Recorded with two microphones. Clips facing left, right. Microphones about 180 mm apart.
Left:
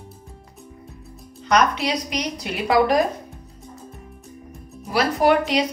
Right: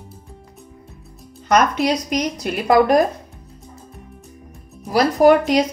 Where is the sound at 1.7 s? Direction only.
45° right (ahead or behind).